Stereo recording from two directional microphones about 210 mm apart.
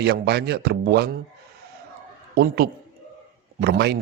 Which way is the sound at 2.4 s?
45° right (ahead or behind).